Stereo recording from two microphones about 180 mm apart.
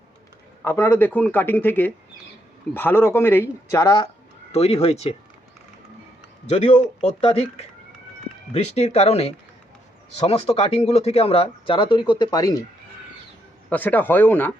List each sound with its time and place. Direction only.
0.6 s speech: 15° left (ahead or behind)
4.5 s speech: 35° left (ahead or behind)
6.5 s speech: 40° left (ahead or behind); by 12.5 s 20° left (ahead or behind)
13.7 s speech: 10° left (ahead or behind)